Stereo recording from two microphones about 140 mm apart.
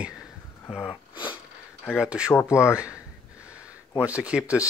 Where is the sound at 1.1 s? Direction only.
35° left (ahead or behind).